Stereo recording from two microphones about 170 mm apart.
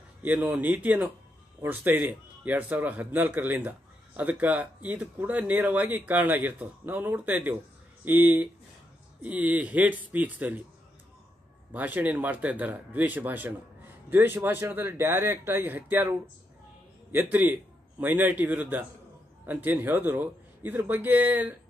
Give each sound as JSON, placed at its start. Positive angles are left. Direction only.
{"t": 0.2, "sound": "speech", "side_deg": -10}
{"t": 11.7, "sound": "speech", "side_deg": -10}